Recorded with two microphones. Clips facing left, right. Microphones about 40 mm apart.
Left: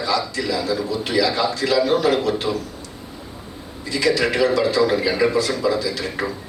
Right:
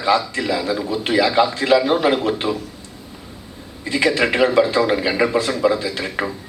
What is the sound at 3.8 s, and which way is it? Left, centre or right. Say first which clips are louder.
A man's voice: right 2 dB; right.